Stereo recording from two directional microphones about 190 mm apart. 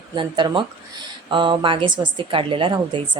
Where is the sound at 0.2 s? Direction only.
25° right (ahead or behind).